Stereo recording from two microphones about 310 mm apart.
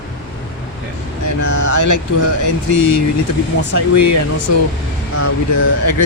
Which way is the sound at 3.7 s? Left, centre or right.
Right.